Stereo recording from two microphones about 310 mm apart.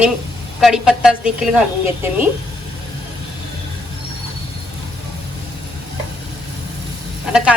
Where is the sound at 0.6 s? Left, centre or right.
Centre.